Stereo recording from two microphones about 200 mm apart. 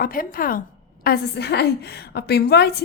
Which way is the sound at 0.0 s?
45° left (ahead or behind).